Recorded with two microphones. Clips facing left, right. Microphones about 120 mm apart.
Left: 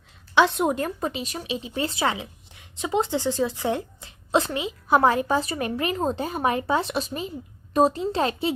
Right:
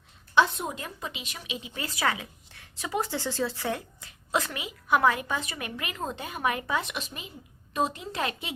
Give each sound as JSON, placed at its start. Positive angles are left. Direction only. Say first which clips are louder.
{"t": 0.3, "sound": "speech", "louder": "left 5 dB", "side_deg": 80}